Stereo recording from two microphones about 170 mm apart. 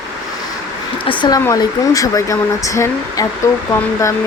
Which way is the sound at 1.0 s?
25° left (ahead or behind).